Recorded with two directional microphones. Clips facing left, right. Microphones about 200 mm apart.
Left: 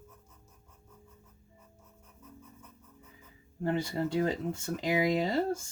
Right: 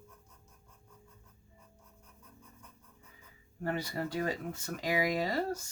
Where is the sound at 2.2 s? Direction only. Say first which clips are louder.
Left 6 dB; 5° left (ahead or behind).